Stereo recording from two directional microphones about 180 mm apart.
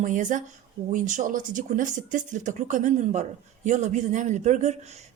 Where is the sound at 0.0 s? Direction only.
45° right (ahead or behind).